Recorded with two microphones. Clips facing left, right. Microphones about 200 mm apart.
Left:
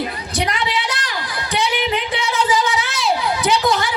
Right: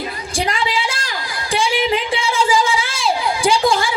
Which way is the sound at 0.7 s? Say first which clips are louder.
Right 1 dB; 30° right (ahead or behind).